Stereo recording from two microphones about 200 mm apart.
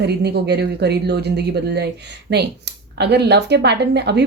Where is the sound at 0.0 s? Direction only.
55° right (ahead or behind).